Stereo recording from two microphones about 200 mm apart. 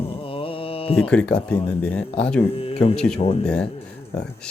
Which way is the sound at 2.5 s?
30° left (ahead or behind).